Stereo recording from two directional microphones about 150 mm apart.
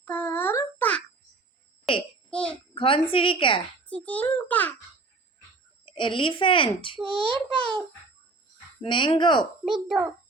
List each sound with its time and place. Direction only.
0.0 s a sound: 15° left (ahead or behind)
2.3 s a child's voice: 5° left (ahead or behind)
2.7 s a child's voice: 35° left (ahead or behind)
3.8 s a child's voice: 10° left (ahead or behind)
5.8 s a child's voice: 35° left (ahead or behind)
7.0 s a child's voice: 5° left (ahead or behind)
8.8 s a child's voice: 35° left (ahead or behind)
9.6 s a child's voice: centre (ahead or behind)